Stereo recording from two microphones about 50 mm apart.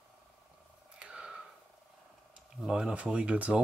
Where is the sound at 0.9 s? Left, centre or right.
Centre.